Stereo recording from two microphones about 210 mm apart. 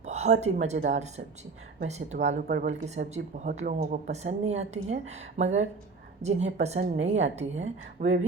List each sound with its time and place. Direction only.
0.0 s a woman's voice: 30° right (ahead or behind)